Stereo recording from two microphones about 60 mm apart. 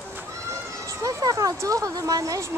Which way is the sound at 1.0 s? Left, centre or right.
Right.